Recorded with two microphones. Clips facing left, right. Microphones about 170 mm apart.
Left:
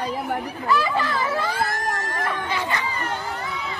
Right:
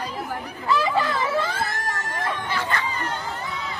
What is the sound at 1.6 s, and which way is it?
Crowd, centre (ahead or behind).